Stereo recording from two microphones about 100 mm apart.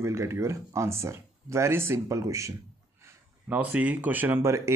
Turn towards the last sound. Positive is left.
turn(degrees=-30)  # may be behind; listen again after turning